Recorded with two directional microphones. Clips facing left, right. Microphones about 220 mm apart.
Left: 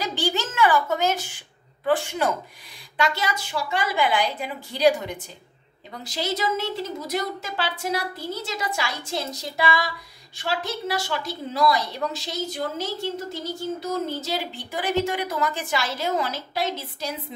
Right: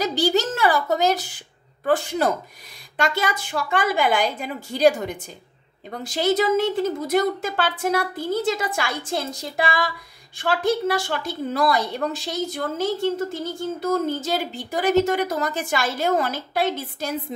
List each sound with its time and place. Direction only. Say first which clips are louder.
0.0 s a woman's voice: right 6 dB; 40° right (ahead or behind)
3.0 s a woman's voice: right 2 dB; 50° right (ahead or behind)